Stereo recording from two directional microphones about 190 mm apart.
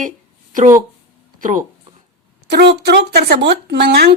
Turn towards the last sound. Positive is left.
turn(degrees=-55)  # may be behind; listen again after turning